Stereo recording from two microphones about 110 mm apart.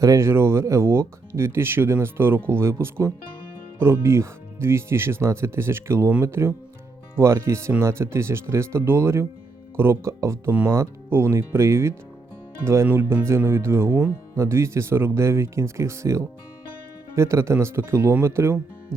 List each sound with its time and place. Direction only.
0.0 s speech: 30° right (ahead or behind)